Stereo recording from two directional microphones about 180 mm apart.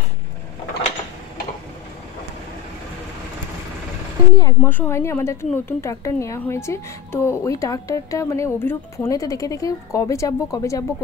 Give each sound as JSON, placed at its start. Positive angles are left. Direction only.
{"t": 4.3, "sound": "a woman's voice", "side_deg": 20}